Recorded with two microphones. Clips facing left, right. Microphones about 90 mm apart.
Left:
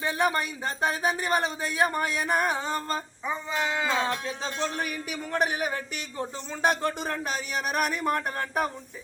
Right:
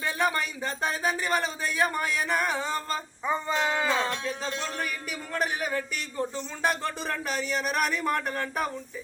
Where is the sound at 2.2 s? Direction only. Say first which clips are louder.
Left 3 dB; 45° left (ahead or behind).